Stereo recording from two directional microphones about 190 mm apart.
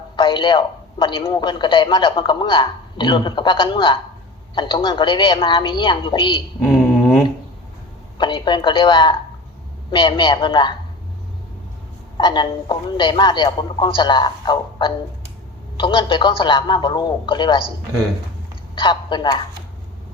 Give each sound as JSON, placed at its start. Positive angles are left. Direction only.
{"t": 0.2, "sound": "a man's voice", "side_deg": 25}
{"t": 6.6, "sound": "a sound", "side_deg": 10}
{"t": 8.2, "sound": "a man's voice", "side_deg": 25}
{"t": 12.1, "sound": "a man's voice", "side_deg": 25}
{"t": 18.7, "sound": "a man's voice", "side_deg": 25}